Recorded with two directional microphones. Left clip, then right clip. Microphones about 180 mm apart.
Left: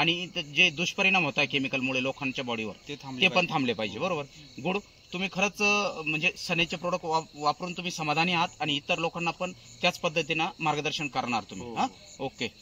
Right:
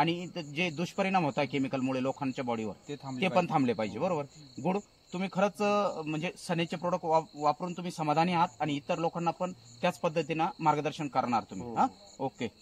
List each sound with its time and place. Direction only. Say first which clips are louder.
0.0 s a man's voice: left 4 dB; centre (ahead or behind)